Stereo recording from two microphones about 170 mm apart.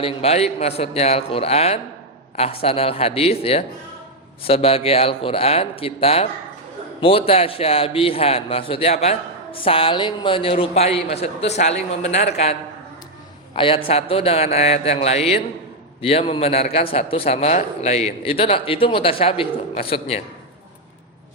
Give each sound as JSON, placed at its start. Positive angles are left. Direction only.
{"t": 0.0, "sound": "a man's voice", "side_deg": 35}
{"t": 13.6, "sound": "a man's voice", "side_deg": 30}